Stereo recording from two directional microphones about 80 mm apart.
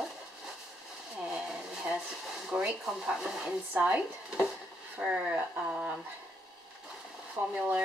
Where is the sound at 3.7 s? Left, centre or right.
Centre.